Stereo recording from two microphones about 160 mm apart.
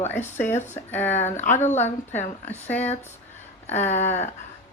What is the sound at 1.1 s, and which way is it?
Speech, 45° left (ahead or behind).